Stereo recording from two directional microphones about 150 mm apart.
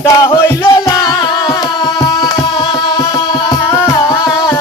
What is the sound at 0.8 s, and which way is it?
Music, 25° left (ahead or behind).